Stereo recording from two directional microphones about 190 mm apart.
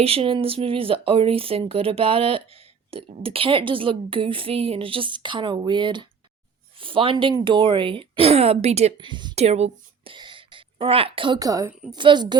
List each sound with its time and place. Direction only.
0.0 s a woman's voice: 30° right (ahead or behind)